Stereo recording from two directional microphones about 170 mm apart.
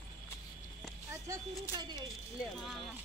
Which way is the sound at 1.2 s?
25° right (ahead or behind).